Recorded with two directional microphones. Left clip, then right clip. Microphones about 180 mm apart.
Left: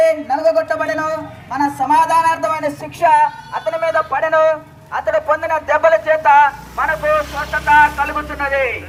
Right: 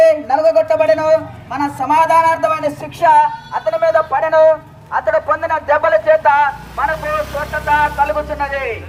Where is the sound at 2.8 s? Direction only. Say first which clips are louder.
Right 2 dB; 60° right (ahead or behind).